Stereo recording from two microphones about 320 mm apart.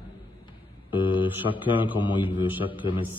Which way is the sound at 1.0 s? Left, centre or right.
Centre.